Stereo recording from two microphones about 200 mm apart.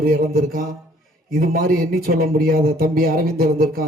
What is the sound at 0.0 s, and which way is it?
Speech, 45° right (ahead or behind).